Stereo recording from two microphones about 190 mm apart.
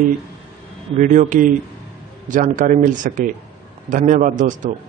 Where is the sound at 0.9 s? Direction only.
40° right (ahead or behind).